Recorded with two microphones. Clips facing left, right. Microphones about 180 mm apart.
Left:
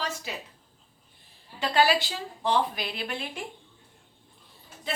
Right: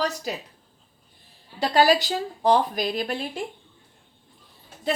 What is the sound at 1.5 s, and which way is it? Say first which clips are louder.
A woman's voice: right 4 dB; 40° right (ahead or behind).